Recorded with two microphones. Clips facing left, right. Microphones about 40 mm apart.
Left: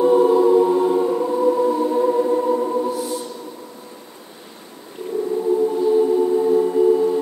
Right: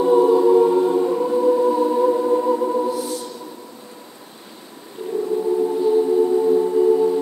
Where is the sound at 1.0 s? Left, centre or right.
Centre.